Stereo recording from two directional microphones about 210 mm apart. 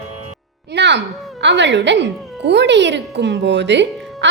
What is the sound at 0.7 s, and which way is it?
A woman's voice, 55° right (ahead or behind).